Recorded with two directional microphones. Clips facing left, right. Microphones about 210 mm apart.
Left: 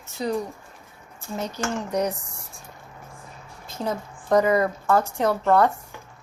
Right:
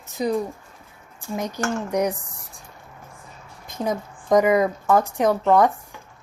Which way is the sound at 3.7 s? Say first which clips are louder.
Right 3 dB; 15° right (ahead or behind).